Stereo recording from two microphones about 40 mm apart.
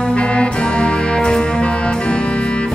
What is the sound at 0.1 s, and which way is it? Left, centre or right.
Music, left.